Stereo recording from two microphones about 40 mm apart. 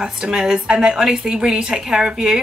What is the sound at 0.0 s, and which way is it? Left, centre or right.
Speech, centre.